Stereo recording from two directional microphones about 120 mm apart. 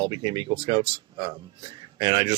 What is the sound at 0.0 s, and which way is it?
Speech, 40° right (ahead or behind).